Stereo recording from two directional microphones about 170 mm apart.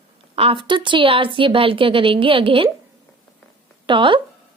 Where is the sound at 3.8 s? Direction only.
30° right (ahead or behind).